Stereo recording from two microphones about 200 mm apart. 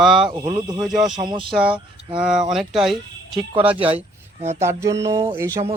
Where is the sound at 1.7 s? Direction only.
25° right (ahead or behind).